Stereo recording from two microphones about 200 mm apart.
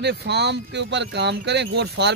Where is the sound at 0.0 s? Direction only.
55° right (ahead or behind).